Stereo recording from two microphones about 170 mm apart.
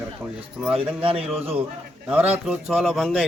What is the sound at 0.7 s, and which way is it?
Speech, 35° right (ahead or behind).